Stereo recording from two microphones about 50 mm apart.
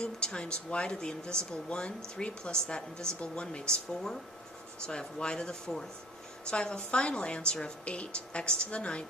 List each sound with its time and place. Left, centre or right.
0.0 s a woman's voice: centre